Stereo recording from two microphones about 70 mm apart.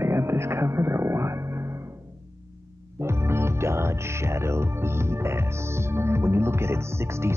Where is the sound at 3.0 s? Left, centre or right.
Right.